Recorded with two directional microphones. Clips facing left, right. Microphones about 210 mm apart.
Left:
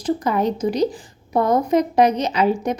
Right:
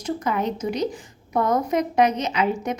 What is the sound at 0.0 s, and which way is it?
A woman's voice, 35° left (ahead or behind).